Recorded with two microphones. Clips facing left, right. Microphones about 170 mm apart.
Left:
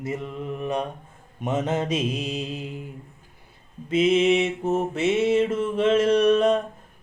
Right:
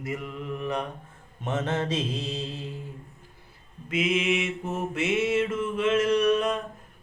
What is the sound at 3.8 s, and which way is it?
Mantra, 30° left (ahead or behind).